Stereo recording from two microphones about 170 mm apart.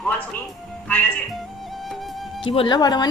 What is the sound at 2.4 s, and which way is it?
Speech, 30° left (ahead or behind).